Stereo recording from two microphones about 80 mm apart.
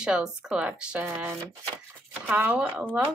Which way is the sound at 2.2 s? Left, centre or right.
Right.